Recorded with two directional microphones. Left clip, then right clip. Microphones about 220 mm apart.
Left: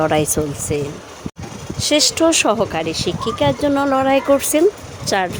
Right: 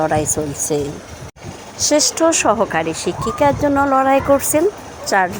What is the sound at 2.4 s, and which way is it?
Speech, 15° left (ahead or behind).